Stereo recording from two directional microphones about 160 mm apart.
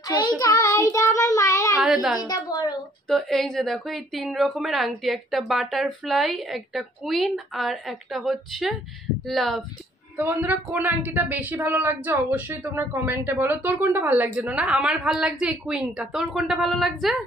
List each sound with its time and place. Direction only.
0.4 s child singing: 20° left (ahead or behind)
1.8 s a woman's voice: centre (ahead or behind)
10.1 s speech: 10° right (ahead or behind)